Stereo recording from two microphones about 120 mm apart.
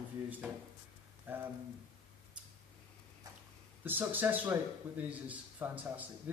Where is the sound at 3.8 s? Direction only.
15° right (ahead or behind).